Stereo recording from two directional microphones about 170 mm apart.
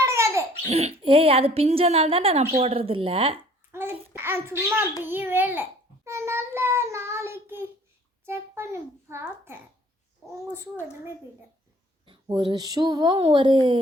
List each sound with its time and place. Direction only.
0.0 s baby laughter: 15° right (ahead or behind)
0.7 s a woman's voice: 35° right (ahead or behind)
3.7 s a child's voice: 15° right (ahead or behind)
5.0 s child singing: 10° right (ahead or behind)
8.2 s a child's voice: 15° right (ahead or behind)
9.2 s child singing: 15° right (ahead or behind)
12.0 s speech: 30° right (ahead or behind)